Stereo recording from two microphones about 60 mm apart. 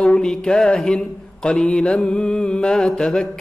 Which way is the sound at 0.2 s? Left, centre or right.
Centre.